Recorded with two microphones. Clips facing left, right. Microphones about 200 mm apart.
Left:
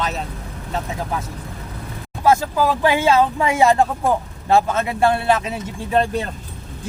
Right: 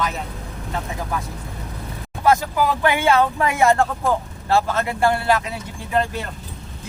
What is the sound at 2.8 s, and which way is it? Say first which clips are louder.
Speech: left 2 dB; 25° left (ahead or behind).